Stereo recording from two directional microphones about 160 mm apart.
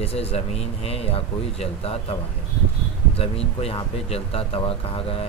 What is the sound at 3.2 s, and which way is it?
Speech, 35° left (ahead or behind).